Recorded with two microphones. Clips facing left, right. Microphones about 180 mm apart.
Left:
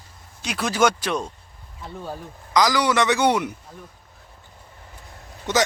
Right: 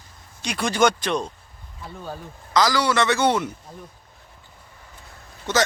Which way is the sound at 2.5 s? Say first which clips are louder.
Left 1 dB; 15° left (ahead or behind).